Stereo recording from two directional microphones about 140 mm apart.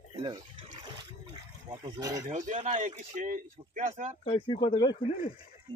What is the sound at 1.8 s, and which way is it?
Speech, 25° right (ahead or behind).